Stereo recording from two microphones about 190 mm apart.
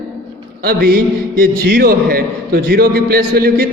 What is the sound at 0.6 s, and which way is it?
A man's voice, 50° right (ahead or behind).